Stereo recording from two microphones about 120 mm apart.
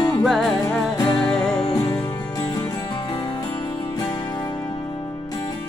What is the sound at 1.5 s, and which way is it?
Music, 50° left (ahead or behind).